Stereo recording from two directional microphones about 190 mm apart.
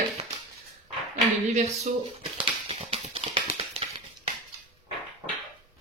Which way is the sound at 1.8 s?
30° right (ahead or behind).